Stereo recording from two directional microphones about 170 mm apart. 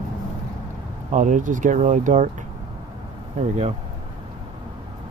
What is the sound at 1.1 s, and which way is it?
Speech, 45° right (ahead or behind).